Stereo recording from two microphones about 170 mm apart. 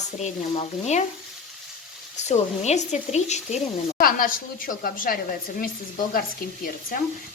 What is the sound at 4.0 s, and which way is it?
Speech, 55° left (ahead or behind).